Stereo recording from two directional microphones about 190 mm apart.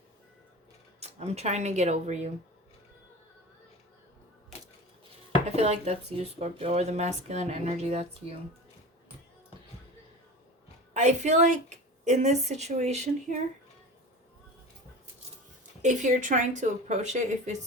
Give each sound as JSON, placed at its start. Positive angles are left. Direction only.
{"t": 0.9, "sound": "speech", "side_deg": -35}
{"t": 5.5, "sound": "speech", "side_deg": -35}
{"t": 10.9, "sound": "speech", "side_deg": -40}
{"t": 15.8, "sound": "speech", "side_deg": -40}